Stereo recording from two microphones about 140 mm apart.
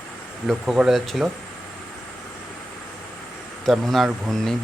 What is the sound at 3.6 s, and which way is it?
Speech, centre (ahead or behind).